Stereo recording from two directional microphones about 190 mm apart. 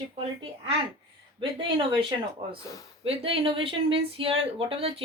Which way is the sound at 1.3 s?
25° right (ahead or behind).